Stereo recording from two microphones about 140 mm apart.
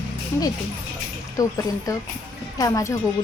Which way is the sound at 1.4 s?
25° left (ahead or behind).